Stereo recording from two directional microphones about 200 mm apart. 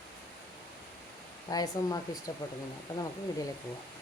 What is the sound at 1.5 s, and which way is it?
Speech, 20° left (ahead or behind).